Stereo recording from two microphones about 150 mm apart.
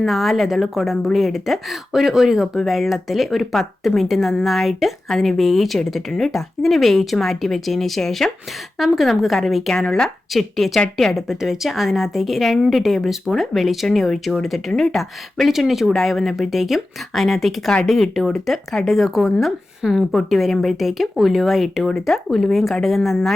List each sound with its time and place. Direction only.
0.0 s a woman's voice: centre (ahead or behind)